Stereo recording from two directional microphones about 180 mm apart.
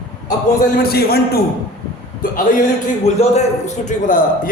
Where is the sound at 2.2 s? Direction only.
50° left (ahead or behind).